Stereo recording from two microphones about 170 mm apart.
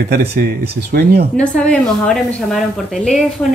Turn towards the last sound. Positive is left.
turn(degrees=0)  # may be behind; listen again after turning